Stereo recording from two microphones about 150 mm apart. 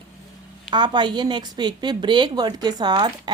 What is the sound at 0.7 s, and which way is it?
A woman's voice, 30° right (ahead or behind).